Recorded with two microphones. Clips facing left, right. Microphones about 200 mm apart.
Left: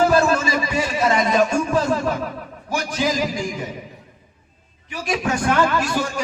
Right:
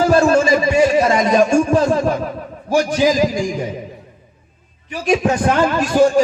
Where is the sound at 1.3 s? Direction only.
45° right (ahead or behind).